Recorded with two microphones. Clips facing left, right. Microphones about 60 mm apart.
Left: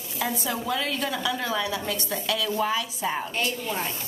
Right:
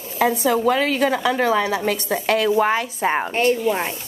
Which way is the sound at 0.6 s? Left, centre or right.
Right.